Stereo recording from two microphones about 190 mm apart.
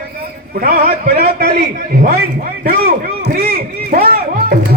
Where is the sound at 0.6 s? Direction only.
50° right (ahead or behind).